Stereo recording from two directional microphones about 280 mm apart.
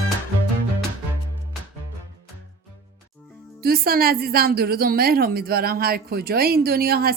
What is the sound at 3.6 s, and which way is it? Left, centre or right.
A woman's voice, right.